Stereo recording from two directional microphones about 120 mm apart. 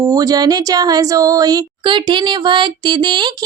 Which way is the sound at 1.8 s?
40° right (ahead or behind).